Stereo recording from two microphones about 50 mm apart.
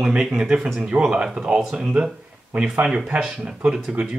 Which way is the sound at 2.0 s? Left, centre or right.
Centre.